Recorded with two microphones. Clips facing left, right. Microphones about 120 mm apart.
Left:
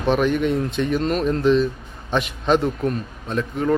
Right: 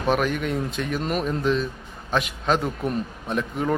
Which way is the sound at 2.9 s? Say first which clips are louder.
Left 1 dB; 15° right (ahead or behind).